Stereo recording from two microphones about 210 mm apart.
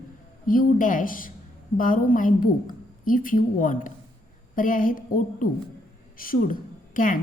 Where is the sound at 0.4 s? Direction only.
40° left (ahead or behind).